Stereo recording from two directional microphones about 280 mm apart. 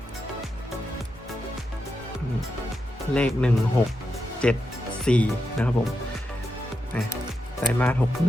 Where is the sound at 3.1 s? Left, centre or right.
Centre.